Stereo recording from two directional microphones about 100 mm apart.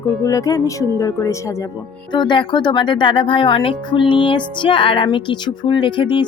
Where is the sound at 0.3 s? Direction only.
35° left (ahead or behind).